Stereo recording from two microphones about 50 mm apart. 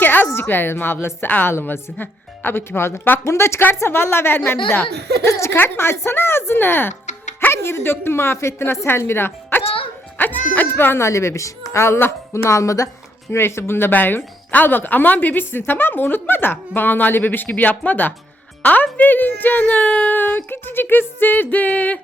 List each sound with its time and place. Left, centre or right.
0.0 s a sound: left
0.3 s speech: left
1.3 s a woman's voice: left
5.2 s speech: left
5.5 s a woman's voice: left
10.2 s speech: left
11.0 s a woman's voice: left
13.3 s speech: left
13.9 s a woman's voice: left
20.1 s a woman's voice: left